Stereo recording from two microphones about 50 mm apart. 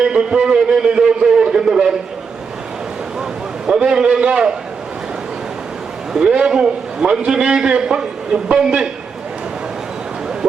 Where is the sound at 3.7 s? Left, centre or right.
Centre.